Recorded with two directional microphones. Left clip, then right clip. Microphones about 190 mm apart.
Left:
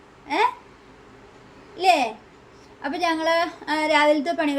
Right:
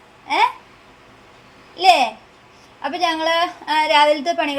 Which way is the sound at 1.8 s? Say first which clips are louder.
Right 5 dB; 15° right (ahead or behind).